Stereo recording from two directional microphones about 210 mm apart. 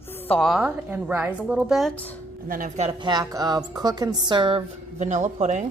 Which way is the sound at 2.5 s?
40° right (ahead or behind).